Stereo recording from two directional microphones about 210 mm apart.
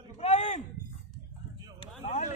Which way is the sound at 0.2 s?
30° left (ahead or behind).